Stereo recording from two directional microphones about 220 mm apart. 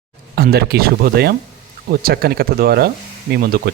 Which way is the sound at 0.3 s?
45° right (ahead or behind).